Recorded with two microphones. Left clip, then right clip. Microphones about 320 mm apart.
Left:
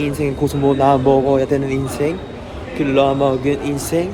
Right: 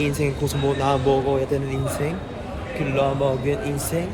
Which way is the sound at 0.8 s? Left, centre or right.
Centre.